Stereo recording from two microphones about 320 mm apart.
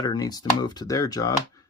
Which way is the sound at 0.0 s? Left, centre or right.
Centre.